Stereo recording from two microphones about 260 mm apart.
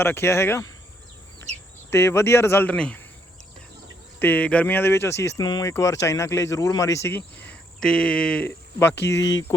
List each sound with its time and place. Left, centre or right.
0.0 s speech: centre
1.9 s speech: centre
4.2 s speech: centre
9.0 s speech: left